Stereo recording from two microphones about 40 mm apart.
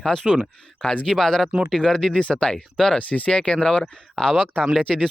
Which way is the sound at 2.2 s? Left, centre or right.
Left.